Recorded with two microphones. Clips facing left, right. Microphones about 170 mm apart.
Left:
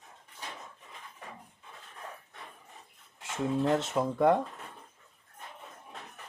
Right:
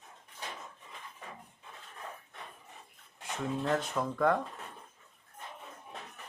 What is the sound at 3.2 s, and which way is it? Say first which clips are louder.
Speech: left 5 dB; 20° left (ahead or behind).